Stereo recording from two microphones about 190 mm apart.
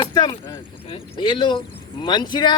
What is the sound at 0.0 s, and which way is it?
Speech, 20° left (ahead or behind).